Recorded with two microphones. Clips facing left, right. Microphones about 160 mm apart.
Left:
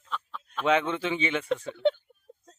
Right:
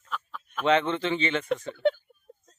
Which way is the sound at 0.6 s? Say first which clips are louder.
Right 1 dB; 10° left (ahead or behind).